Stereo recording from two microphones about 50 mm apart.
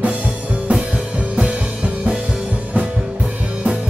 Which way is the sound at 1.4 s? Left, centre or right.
Right.